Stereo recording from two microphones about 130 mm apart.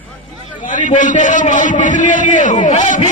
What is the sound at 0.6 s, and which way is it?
A man's voice, 80° left.